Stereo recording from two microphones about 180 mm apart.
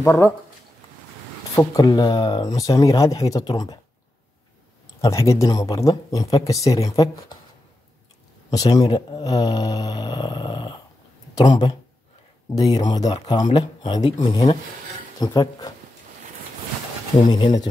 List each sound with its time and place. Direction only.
0.0 s speech: 15° left (ahead or behind)
1.5 s speech: 20° left (ahead or behind)
5.0 s speech: 15° left (ahead or behind)
8.5 s speech: 25° left (ahead or behind)
17.3 s speech: 25° left (ahead or behind)